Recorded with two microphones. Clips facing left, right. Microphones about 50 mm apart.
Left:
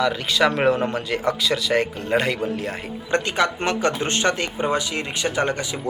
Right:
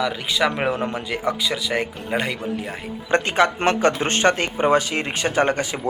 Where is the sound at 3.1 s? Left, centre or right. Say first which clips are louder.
Right 3 dB; right.